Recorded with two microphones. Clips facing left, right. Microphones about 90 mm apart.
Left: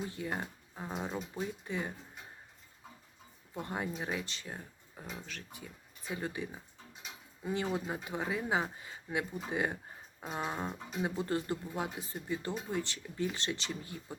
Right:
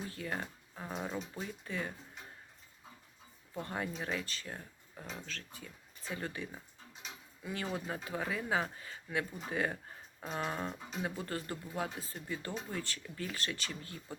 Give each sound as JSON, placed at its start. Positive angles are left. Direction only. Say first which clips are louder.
{"t": 0.1, "sound": "speech", "louder": "left 2 dB", "side_deg": 20}
{"t": 3.5, "sound": "speech", "louder": "left 1 dB", "side_deg": 20}